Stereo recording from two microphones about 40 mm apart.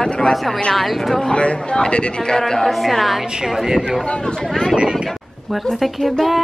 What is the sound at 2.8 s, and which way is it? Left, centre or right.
A woman's voice, centre.